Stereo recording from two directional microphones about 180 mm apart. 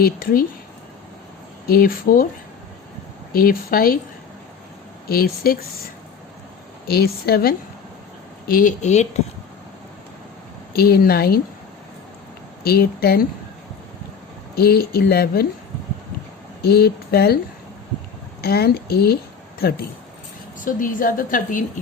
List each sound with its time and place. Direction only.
0.0 s a woman's voice: 55° left (ahead or behind)
1.6 s a woman's voice: 55° left (ahead or behind)
3.3 s a woman's voice: 55° left (ahead or behind)
5.0 s speech: 55° left (ahead or behind)
6.8 s speech: 60° left (ahead or behind); by 9.2 s 40° left (ahead or behind)
10.8 s speech: 60° left (ahead or behind)
12.6 s speech: 60° left (ahead or behind)
14.5 s speech: 60° left (ahead or behind)
16.6 s speech: 60° left (ahead or behind)
18.4 s a woman's voice: 60° left (ahead or behind)